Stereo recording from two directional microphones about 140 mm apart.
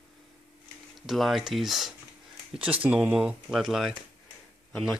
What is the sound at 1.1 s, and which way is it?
Speech, centre (ahead or behind).